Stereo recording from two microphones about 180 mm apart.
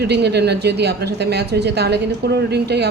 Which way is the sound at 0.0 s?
65° right (ahead or behind).